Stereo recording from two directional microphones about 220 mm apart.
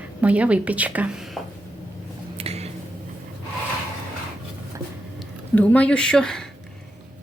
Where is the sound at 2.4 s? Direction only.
25° right (ahead or behind).